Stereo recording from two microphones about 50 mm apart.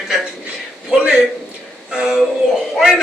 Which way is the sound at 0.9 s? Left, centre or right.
Centre.